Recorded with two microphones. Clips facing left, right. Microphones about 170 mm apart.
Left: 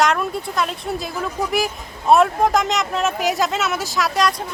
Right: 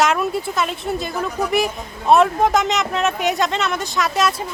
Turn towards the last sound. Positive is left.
turn(degrees=0)  # may be behind; listen again after turning